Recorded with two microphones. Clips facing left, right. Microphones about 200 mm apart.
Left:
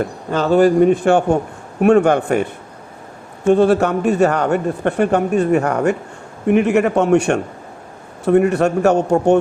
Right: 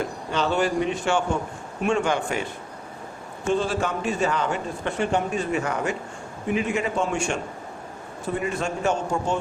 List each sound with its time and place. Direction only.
0.0 s a man's voice: 45° left (ahead or behind); by 9.4 s 65° left (ahead or behind)